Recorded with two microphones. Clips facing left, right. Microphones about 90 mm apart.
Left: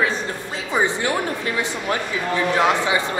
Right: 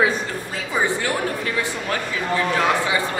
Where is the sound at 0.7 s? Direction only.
20° left (ahead or behind).